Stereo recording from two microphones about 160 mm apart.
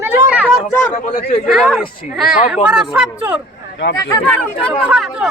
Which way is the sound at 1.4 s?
Centre (ahead or behind).